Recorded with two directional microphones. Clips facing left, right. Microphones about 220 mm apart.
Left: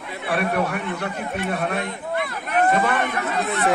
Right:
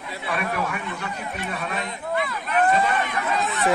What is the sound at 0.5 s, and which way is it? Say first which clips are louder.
Speech: left 4 dB; 55° left (ahead or behind).